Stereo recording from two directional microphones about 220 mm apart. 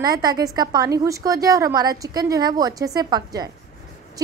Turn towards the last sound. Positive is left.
turn(degrees=-20)  # may be behind; listen again after turning